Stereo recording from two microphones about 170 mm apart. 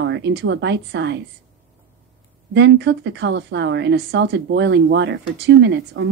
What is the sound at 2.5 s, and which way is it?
A woman's voice, 90° right.